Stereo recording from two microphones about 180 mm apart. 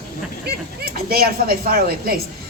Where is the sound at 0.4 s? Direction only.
60° right (ahead or behind).